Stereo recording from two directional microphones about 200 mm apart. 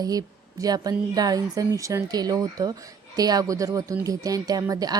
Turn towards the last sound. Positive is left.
turn(degrees=-20)  # may be behind; listen again after turning